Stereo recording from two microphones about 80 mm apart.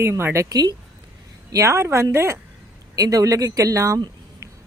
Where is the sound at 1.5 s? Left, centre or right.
Right.